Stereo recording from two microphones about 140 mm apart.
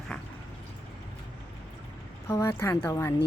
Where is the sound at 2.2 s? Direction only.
20° left (ahead or behind).